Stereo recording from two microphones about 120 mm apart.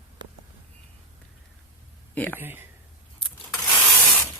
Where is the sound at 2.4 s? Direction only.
15° right (ahead or behind).